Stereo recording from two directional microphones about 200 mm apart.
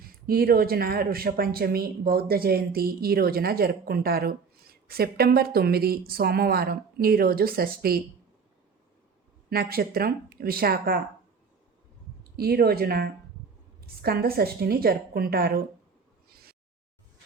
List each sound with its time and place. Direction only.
0.0 s speech: 50° right (ahead or behind)
9.5 s speech: 50° right (ahead or behind)
12.4 s speech: 50° right (ahead or behind)